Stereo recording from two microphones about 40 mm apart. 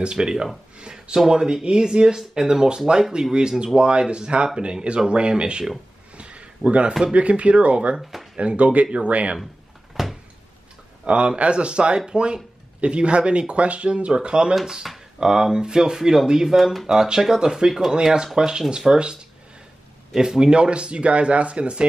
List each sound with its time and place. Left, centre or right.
0.0 s speech: right
5.0 s a sound: right
7.2 s speech: right
10.0 s a sound: centre
11.1 s speech: right
15.1 s speech: centre
20.2 s speech: centre